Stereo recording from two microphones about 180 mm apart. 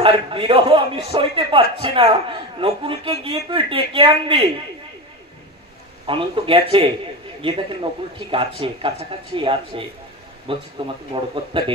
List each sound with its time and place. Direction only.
0.0 s a man's voice: 30° right (ahead or behind)
6.0 s a man's voice: 30° right (ahead or behind)